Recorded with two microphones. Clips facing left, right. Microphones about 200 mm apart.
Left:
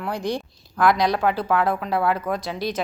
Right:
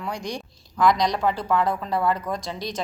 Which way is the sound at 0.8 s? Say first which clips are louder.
Left 1 dB; 5° left (ahead or behind).